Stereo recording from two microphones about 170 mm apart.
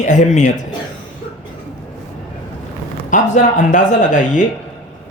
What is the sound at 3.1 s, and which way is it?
Speech, 45° left (ahead or behind).